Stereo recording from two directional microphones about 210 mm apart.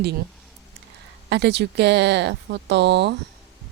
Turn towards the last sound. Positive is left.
turn(degrees=-55)  # may be behind; listen again after turning